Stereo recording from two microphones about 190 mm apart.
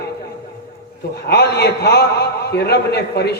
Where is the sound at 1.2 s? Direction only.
60° left (ahead or behind).